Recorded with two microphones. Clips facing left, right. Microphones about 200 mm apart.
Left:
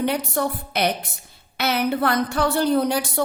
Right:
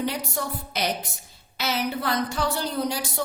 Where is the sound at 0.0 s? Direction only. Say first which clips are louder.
Left 6 dB; 60° left (ahead or behind).